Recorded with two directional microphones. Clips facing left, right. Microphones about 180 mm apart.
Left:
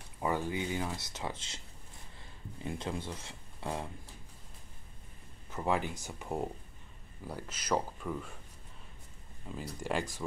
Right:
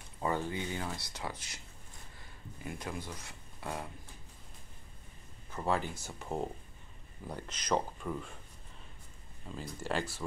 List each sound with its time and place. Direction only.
0.2 s speech: 15° left (ahead or behind)
5.7 s speech: 15° left (ahead or behind)
9.5 s speech: 10° left (ahead or behind)